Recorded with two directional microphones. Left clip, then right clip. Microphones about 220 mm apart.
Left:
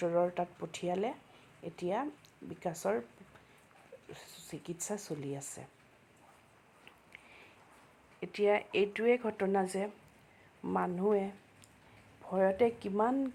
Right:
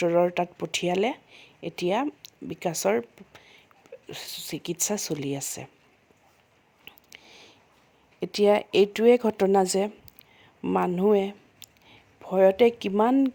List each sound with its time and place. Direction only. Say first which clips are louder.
0.0 s speech: right 9 dB; 50° right (ahead or behind)
6.8 s a sound: right 8 dB; 55° right (ahead or behind)
8.2 s speech: right 9 dB; 55° right (ahead or behind)